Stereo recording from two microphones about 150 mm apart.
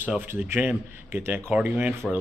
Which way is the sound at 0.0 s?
15° right (ahead or behind).